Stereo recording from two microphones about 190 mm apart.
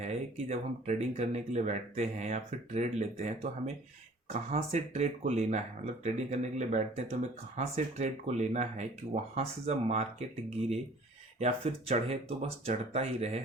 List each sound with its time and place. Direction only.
0.0 s speech: 35° right (ahead or behind)